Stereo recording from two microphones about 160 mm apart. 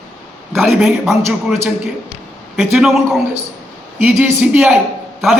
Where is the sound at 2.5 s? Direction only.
Centre (ahead or behind).